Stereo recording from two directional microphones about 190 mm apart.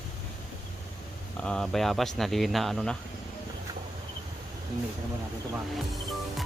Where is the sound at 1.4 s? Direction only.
5° left (ahead or behind).